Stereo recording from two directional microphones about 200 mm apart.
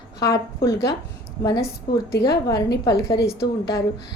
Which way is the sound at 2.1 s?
55° left (ahead or behind).